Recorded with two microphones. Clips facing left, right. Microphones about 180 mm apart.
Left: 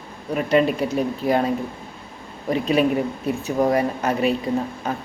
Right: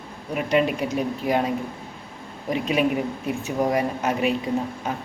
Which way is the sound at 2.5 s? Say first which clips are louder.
Left 3 dB; 35° left (ahead or behind).